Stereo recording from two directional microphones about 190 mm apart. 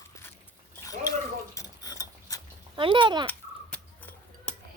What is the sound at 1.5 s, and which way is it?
Tick-tock, 20° left (ahead or behind).